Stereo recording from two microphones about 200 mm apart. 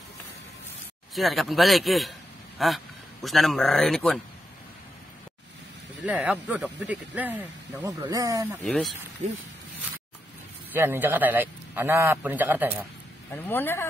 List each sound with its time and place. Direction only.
1.1 s a man's voice: centre (ahead or behind)
6.0 s speech: 5° right (ahead or behind)
8.6 s a man's voice: 5° left (ahead or behind)
10.7 s speech: 10° right (ahead or behind)
13.3 s speech: 10° left (ahead or behind)